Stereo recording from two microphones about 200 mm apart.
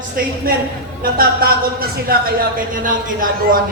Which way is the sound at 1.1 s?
50° right (ahead or behind).